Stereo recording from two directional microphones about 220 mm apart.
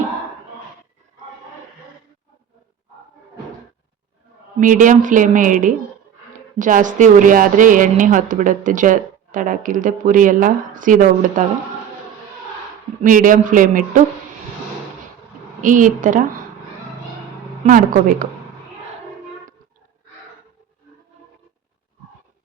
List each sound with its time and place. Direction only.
4.6 s a woman's voice: 35° right (ahead or behind)
13.0 s a woman's voice: 35° right (ahead or behind)
15.6 s a woman's voice: 35° right (ahead or behind)
17.7 s a woman's voice: 35° right (ahead or behind)